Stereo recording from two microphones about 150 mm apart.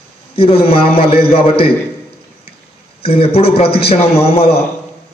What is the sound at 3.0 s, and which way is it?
A man's voice, 40° left (ahead or behind).